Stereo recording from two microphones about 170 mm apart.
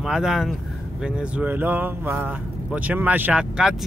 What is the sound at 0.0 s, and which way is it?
Speech, 5° right (ahead or behind).